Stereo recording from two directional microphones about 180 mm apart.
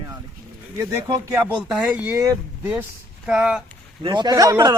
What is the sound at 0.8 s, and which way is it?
Speech, 15° right (ahead or behind).